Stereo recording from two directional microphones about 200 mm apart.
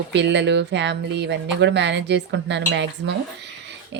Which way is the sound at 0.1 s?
60° right (ahead or behind).